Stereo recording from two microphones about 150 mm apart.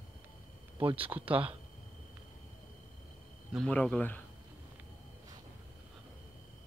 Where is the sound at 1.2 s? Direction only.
35° right (ahead or behind).